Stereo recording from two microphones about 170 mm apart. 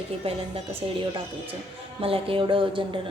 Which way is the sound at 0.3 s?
35° right (ahead or behind).